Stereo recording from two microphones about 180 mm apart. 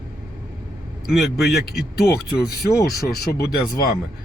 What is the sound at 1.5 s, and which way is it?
Speech, 60° left (ahead or behind).